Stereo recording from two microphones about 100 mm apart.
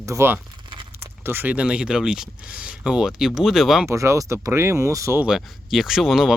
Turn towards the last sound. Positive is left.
turn(degrees=-5)  # may be behind; listen again after turning